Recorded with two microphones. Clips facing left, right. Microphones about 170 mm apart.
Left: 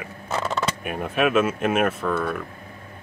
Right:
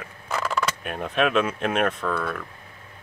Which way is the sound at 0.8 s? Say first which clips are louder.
Left 2 dB; 10° left (ahead or behind).